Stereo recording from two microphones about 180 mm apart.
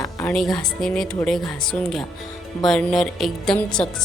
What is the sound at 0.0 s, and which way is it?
Music, 15° left (ahead or behind).